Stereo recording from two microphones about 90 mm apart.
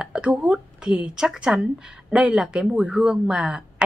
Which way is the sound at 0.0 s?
10° right (ahead or behind).